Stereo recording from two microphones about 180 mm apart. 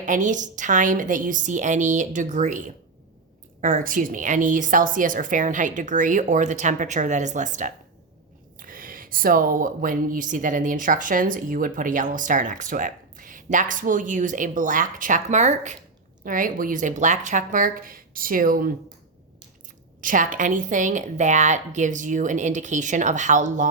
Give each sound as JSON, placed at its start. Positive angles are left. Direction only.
{"t": 0.0, "sound": "speech", "side_deg": -45}
{"t": 20.0, "sound": "speech", "side_deg": -45}